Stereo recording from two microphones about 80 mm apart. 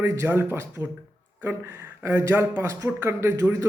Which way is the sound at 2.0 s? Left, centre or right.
Right.